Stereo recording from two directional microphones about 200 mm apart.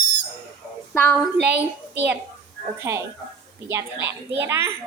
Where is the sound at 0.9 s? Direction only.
5° left (ahead or behind).